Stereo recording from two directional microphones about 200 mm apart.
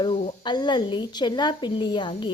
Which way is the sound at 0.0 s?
25° left (ahead or behind).